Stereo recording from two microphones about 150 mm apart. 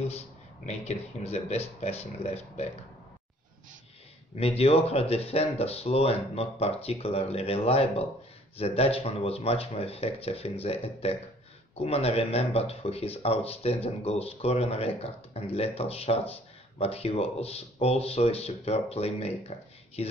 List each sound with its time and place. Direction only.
0.7 s speech: 45° left (ahead or behind)
4.4 s speech: 40° left (ahead or behind)